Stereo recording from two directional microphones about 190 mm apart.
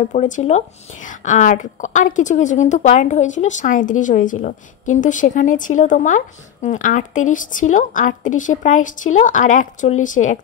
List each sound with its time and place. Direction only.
0.1 s speech: 40° left (ahead or behind)